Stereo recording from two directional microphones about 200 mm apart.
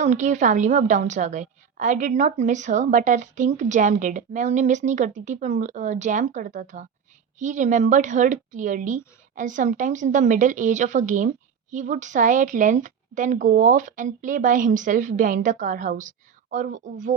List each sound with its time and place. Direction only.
0.0 s a woman's voice: 35° right (ahead or behind)